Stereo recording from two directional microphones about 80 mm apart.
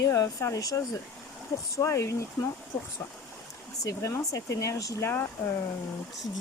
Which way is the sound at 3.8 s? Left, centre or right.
Left.